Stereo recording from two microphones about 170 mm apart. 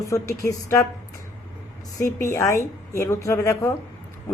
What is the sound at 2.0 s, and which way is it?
A woman's voice, 15° left (ahead or behind).